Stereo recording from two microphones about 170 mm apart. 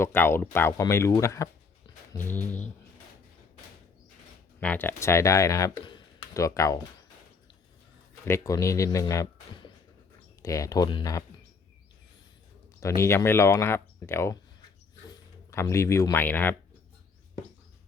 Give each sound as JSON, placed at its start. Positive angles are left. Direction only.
{"t": 0.0, "sound": "speech", "side_deg": 15}
{"t": 4.6, "sound": "speech", "side_deg": 10}
{"t": 8.2, "sound": "speech", "side_deg": 20}
{"t": 12.8, "sound": "speech", "side_deg": 15}
{"t": 15.4, "sound": "speech", "side_deg": 15}